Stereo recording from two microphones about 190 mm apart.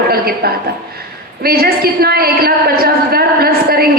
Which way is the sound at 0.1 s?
55° right (ahead or behind).